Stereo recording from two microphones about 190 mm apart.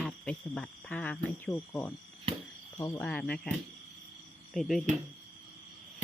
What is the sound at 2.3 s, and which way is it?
Cricket, 30° right (ahead or behind).